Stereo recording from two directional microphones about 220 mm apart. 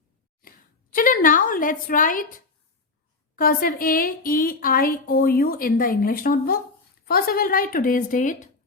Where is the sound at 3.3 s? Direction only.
40° left (ahead or behind).